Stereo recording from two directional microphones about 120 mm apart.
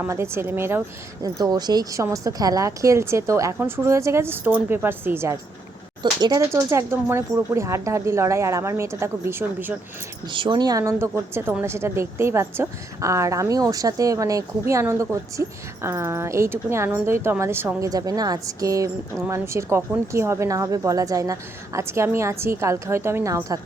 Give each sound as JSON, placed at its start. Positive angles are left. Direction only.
{"t": 0.1, "sound": "a woman's voice", "side_deg": -20}
{"t": 1.2, "sound": "a woman's voice", "side_deg": -35}
{"t": 6.0, "sound": "speech", "side_deg": -35}
{"t": 6.5, "sound": "a woman's voice", "side_deg": -25}
{"t": 10.3, "sound": "a woman's voice", "side_deg": -40}
{"t": 17.8, "sound": "a woman's voice", "side_deg": -30}